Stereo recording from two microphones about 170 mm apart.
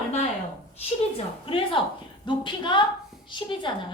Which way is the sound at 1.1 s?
30° left (ahead or behind).